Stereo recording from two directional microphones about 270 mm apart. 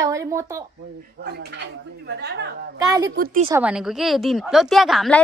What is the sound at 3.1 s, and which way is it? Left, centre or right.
Speech, right.